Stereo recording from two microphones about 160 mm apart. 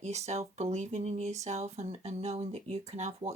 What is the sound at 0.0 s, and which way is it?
Speech, 45° right (ahead or behind).